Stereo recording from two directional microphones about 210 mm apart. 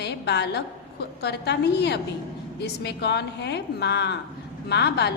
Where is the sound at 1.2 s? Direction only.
50° left (ahead or behind).